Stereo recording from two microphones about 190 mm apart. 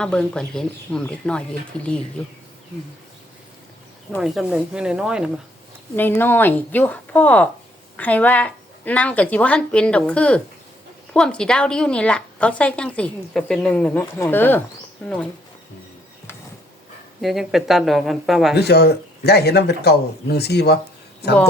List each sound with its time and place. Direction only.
0.0 s speech: 5° left (ahead or behind)
4.2 s speech: centre (ahead or behind)
6.0 s a woman's voice: 10° left (ahead or behind)
17.2 s speech: centre (ahead or behind)
18.5 s speech: 60° left (ahead or behind)